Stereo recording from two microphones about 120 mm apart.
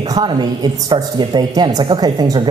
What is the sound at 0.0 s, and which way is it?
Speech, 35° right (ahead or behind).